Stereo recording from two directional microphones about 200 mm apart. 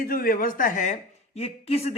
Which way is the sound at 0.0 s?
45° left (ahead or behind).